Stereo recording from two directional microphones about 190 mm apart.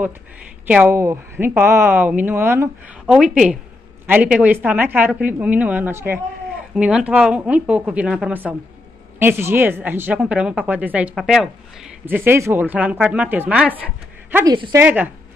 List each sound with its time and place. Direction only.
0.7 s speech: 10° right (ahead or behind)
14.3 s speech: 20° right (ahead or behind)
14.8 s speech: 10° right (ahead or behind)